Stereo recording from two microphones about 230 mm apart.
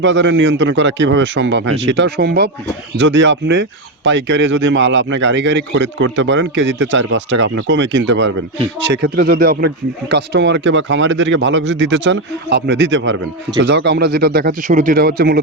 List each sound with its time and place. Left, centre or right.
0.0 s a man's voice: right